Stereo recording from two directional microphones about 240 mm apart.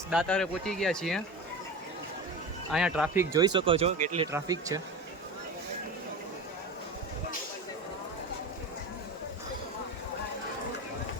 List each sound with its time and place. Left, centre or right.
0.1 s speech: centre
2.7 s speech: centre
3.3 s speech: centre
4.3 s speech: centre